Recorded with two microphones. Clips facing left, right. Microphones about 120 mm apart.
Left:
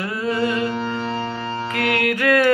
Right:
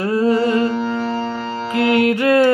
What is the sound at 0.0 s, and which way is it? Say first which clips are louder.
Music: right 6 dB; 35° right (ahead or behind).